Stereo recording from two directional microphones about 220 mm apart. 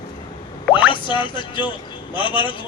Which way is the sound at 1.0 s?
20° left (ahead or behind).